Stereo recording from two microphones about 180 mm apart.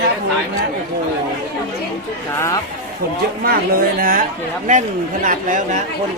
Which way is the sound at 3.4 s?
55° right (ahead or behind).